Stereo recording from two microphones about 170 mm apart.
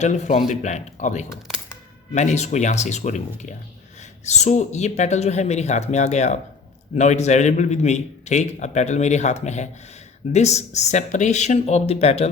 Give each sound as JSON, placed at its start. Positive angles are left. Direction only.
{"t": 0.0, "sound": "a man's voice", "side_deg": 45}